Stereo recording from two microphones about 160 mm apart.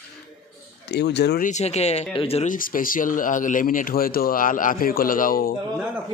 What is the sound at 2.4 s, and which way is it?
Speech, 60° left (ahead or behind).